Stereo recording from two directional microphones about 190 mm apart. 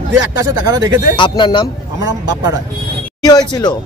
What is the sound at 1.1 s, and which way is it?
Speech, 25° left (ahead or behind).